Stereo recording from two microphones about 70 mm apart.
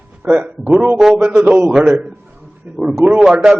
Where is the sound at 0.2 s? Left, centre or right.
Centre.